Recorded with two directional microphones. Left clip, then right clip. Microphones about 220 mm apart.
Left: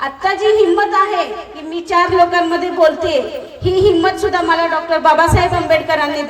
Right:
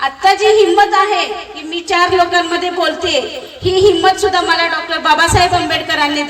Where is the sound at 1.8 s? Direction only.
50° left (ahead or behind).